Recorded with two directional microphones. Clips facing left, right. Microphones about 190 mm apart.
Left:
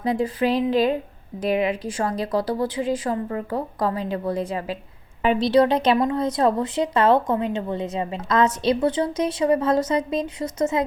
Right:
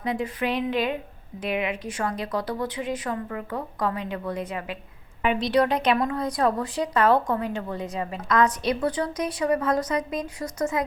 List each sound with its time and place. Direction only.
0.0 s speech: 35° left (ahead or behind)